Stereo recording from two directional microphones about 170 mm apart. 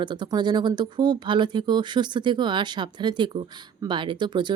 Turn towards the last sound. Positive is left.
turn(degrees=-25)  # may be behind; listen again after turning